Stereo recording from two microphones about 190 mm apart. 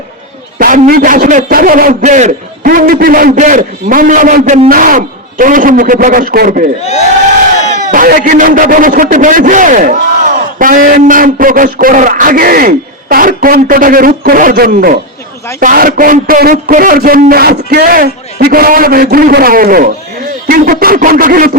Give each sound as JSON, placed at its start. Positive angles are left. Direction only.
{"t": 0.6, "sound": "a man's voice", "side_deg": -50}
{"t": 7.6, "sound": "crowd", "side_deg": 40}
{"t": 7.9, "sound": "a man's voice", "side_deg": -45}